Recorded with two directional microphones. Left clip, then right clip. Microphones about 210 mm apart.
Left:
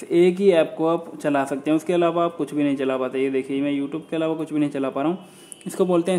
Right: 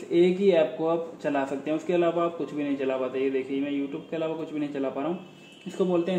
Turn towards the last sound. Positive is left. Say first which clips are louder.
# left 5 dB
turn(degrees=35)  # may be behind; listen again after turning